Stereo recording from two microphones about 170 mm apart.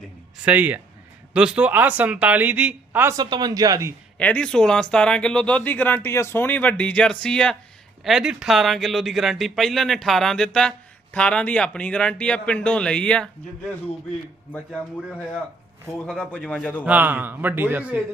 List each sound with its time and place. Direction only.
0.4 s speech: 10° right (ahead or behind)
3.2 s speech: 25° right (ahead or behind)
4.2 s speech: 5° left (ahead or behind)
16.0 s speech: 5° left (ahead or behind)
16.8 s speech: 10° right (ahead or behind)